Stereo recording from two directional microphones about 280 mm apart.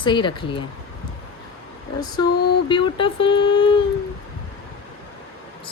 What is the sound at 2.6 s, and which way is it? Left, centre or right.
Speech, centre.